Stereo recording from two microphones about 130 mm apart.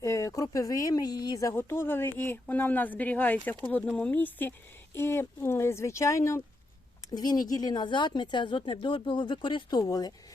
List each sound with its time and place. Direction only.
0.0 s speech: 25° left (ahead or behind)